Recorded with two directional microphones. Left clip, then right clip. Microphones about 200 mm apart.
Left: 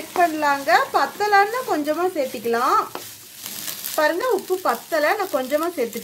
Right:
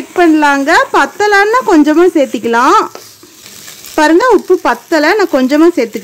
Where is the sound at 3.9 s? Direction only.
50° right (ahead or behind).